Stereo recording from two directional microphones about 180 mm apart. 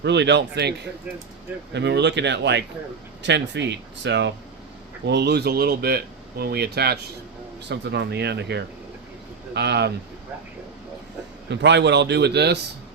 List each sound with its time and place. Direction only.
0.0 s a man's voice: 75° right (ahead or behind)
1.7 s a man's voice: 70° right (ahead or behind)
11.4 s a man's voice: 75° right (ahead or behind)